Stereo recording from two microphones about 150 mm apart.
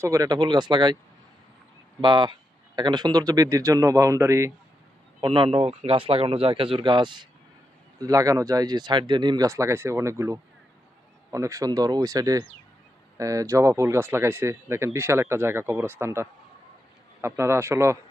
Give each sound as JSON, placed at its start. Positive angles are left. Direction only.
{"t": 0.0, "sound": "speech", "side_deg": -25}
{"t": 2.0, "sound": "speech", "side_deg": -30}
{"t": 5.2, "sound": "speech", "side_deg": -35}